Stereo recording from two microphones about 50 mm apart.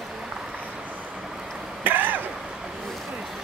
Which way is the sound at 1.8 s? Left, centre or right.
Right.